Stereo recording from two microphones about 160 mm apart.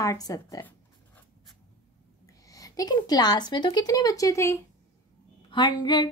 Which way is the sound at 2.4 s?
20° left (ahead or behind).